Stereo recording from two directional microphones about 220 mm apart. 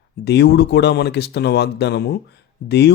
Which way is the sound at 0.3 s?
50° left (ahead or behind).